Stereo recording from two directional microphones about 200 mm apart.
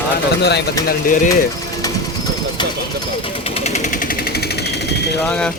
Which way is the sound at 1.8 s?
20° left (ahead or behind).